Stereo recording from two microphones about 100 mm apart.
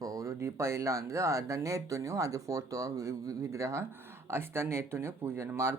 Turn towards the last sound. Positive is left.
turn(degrees=-25)  # may be behind; listen again after turning